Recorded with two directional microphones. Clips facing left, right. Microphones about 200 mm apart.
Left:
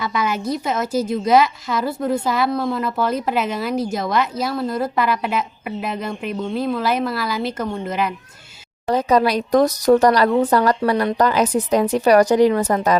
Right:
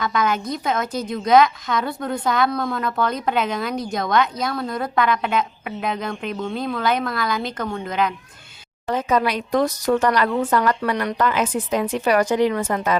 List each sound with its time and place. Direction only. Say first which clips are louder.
0.0 s a woman's voice: even; 5° left (ahead or behind)
8.9 s speech: left 4 dB; 35° left (ahead or behind)